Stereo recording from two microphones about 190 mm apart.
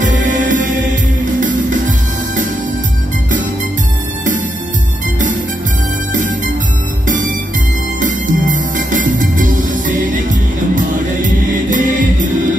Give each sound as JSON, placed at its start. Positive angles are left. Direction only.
{"t": 0.0, "sound": "music", "side_deg": -40}
{"t": 6.1, "sound": "music", "side_deg": -45}
{"t": 8.0, "sound": "music", "side_deg": -45}